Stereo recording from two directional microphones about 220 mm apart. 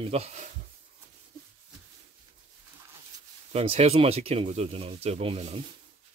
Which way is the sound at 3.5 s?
30° right (ahead or behind).